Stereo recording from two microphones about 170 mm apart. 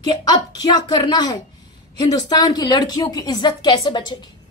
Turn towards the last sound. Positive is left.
turn(degrees=25)  # may be behind; listen again after turning